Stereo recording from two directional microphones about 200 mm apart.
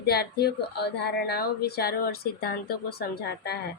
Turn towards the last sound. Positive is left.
turn(degrees=55)  # may be behind; listen again after turning